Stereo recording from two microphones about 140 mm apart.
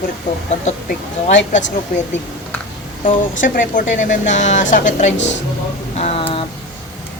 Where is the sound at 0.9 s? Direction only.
60° left (ahead or behind).